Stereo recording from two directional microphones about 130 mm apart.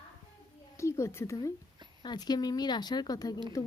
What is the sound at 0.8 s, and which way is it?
Speech, 20° left (ahead or behind).